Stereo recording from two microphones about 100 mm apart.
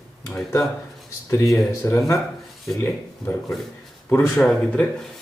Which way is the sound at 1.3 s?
25° left (ahead or behind).